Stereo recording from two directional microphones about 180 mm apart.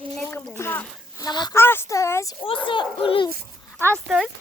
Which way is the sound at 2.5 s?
30° left (ahead or behind).